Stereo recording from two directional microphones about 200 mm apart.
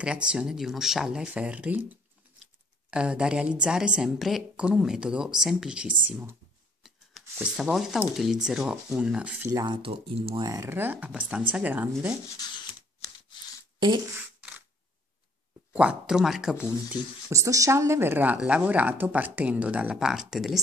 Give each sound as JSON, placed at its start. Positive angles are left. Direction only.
{"t": 0.0, "sound": "a woman's voice", "side_deg": -5}
{"t": 2.9, "sound": "a woman's voice", "side_deg": -5}
{"t": 9.5, "sound": "speech", "side_deg": -20}
{"t": 10.4, "sound": "speech", "side_deg": -15}
{"t": 13.7, "sound": "speech", "side_deg": -20}
{"t": 15.7, "sound": "a woman's voice", "side_deg": -5}
{"t": 16.9, "sound": "speech", "side_deg": -15}